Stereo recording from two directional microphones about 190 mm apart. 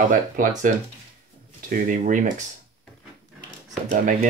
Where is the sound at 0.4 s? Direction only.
45° right (ahead or behind).